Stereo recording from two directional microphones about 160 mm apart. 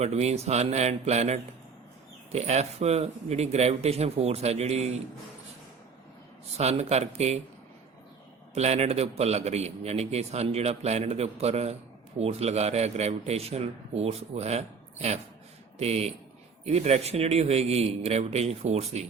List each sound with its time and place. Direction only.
0.0 s a man's voice: 40° right (ahead or behind)
6.6 s speech: 45° right (ahead or behind)
8.5 s a man's voice: 40° right (ahead or behind)